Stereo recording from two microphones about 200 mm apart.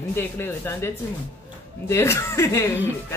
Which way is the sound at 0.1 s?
10° left (ahead or behind).